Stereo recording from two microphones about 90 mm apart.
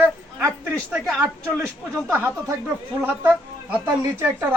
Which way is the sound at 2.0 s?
30° right (ahead or behind).